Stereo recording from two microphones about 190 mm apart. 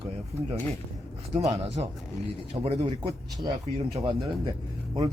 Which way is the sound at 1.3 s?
35° right (ahead or behind).